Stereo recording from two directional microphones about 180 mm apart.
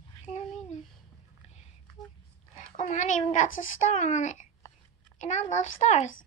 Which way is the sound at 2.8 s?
45° left (ahead or behind).